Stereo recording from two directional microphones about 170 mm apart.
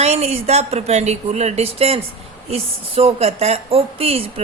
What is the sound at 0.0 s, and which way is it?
A woman's voice, 40° right (ahead or behind).